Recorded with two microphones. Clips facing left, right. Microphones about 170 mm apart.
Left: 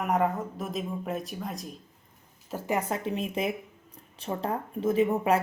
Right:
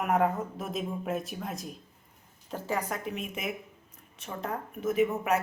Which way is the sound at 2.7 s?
30° left (ahead or behind).